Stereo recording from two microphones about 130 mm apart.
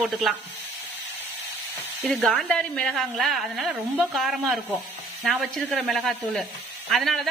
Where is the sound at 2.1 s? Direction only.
Centre (ahead or behind).